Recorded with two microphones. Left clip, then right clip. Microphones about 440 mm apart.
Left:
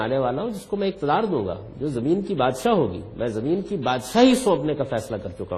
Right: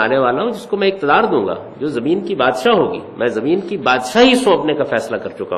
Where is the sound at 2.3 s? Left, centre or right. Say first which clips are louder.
Right 9 dB; left.